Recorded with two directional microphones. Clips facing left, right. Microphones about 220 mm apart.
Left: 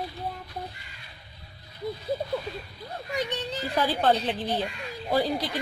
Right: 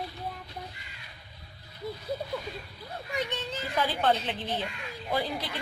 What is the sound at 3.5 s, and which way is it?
A woman's voice, 35° left (ahead or behind).